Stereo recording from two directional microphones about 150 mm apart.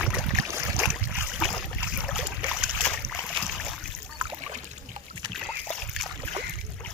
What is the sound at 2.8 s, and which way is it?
Boat, 10° left (ahead or behind).